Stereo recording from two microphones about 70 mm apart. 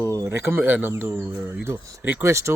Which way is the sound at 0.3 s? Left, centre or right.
Right.